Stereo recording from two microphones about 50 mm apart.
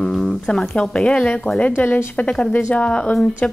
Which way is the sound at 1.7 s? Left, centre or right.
Left.